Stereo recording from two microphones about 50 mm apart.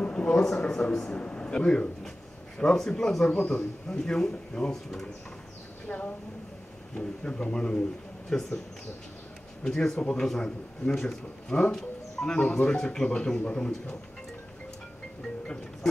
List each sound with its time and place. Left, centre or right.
0.0 s a sound: left
0.3 s speech: centre
9.6 s speech: centre
15.4 s speech: centre